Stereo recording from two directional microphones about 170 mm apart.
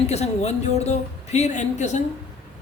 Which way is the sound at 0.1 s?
40° left (ahead or behind).